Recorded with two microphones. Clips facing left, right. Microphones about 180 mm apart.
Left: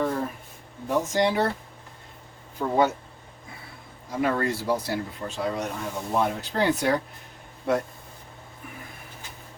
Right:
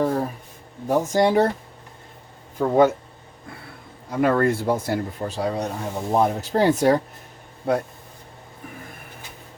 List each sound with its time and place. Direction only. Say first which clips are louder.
0.0 s a sound: right 4 dB; 35° right (ahead or behind)
0.9 s speech: right 4 dB; 40° right (ahead or behind)
2.6 s speech: right 6 dB; 50° right (ahead or behind)
4.2 s speech: right 6 dB; 55° right (ahead or behind)